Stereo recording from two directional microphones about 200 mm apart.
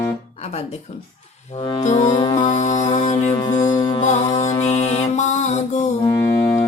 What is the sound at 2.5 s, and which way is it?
Music, 35° left (ahead or behind).